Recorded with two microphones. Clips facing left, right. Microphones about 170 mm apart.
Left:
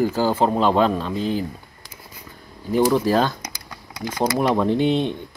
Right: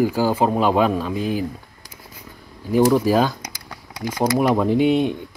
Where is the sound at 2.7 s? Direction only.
10° right (ahead or behind).